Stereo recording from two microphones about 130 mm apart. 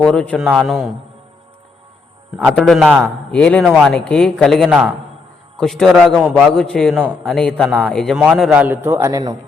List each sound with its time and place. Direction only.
0.0 s a man's voice: 10° left (ahead or behind)
2.6 s a man's voice: 5° left (ahead or behind)
6.9 s a man's voice: 5° right (ahead or behind)
7.3 s a man's voice: 5° left (ahead or behind)
8.6 s a man's voice: 15° right (ahead or behind)